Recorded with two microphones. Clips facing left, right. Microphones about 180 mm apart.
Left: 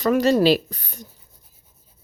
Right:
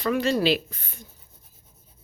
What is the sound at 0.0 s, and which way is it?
Speech, 45° left (ahead or behind).